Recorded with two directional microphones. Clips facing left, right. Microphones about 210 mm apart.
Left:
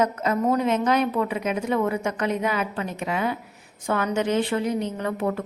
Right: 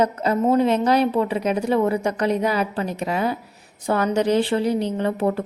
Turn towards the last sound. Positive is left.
turn(degrees=-30)  # may be behind; listen again after turning